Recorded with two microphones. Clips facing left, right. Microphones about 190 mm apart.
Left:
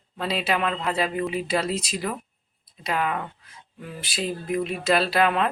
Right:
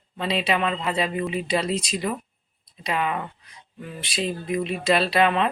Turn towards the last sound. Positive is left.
turn(degrees=0)  # may be behind; listen again after turning